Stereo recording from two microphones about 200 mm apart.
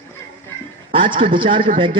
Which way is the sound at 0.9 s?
25° right (ahead or behind).